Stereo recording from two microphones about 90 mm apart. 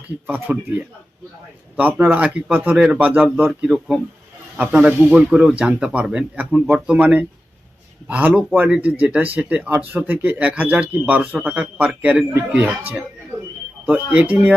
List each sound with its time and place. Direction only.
0.3 s speech: 20° right (ahead or behind)
1.7 s speech: 20° right (ahead or behind)
12.3 s speech: 25° right (ahead or behind)